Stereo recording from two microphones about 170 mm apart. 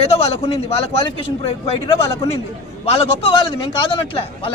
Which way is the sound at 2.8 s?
35° left (ahead or behind).